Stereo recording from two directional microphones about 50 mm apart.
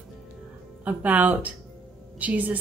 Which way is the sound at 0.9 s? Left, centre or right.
Right.